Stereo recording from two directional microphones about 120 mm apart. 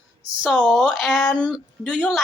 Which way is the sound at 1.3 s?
5° left (ahead or behind).